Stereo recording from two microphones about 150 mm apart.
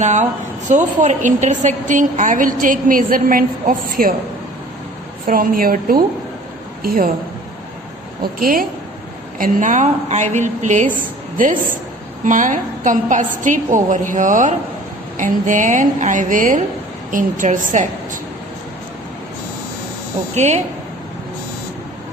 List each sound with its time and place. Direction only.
0.0 s a woman's voice: 50° right (ahead or behind); by 4.1 s 70° right (ahead or behind)
5.2 s a woman's voice: 70° right (ahead or behind)
8.2 s a woman's voice: 75° right (ahead or behind)
9.4 s a woman's voice: 60° right (ahead or behind)
11.3 s a sound: 60° right (ahead or behind)
12.2 s a woman's voice: 60° right (ahead or behind)
20.3 s a woman's voice: 50° right (ahead or behind)